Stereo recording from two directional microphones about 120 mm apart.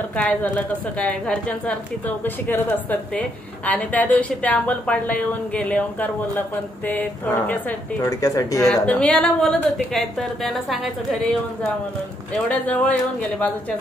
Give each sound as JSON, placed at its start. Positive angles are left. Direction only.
{"t": 0.1, "sound": "a woman's voice", "side_deg": 10}
{"t": 8.0, "sound": "speech", "side_deg": 30}
{"t": 8.6, "sound": "a woman's voice", "side_deg": 10}
{"t": 12.4, "sound": "a woman's voice", "side_deg": 10}